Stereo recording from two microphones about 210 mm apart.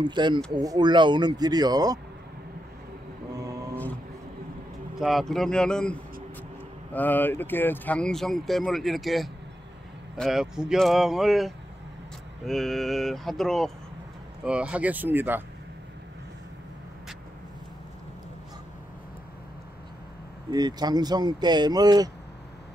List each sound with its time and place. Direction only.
0.0 s speech: 20° right (ahead or behind)
3.3 s vehicle: 15° right (ahead or behind)
4.9 s speech: centre (ahead or behind)
20.5 s speech: 20° right (ahead or behind)